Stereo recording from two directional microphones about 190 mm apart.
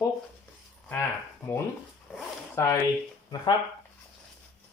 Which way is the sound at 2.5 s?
15° left (ahead or behind).